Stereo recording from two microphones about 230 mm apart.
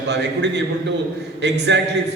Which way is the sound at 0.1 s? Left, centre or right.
Right.